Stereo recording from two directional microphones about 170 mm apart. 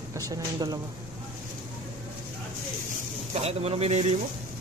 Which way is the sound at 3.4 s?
35° right (ahead or behind).